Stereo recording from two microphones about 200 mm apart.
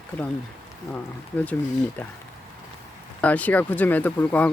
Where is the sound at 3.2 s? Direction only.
5° left (ahead or behind).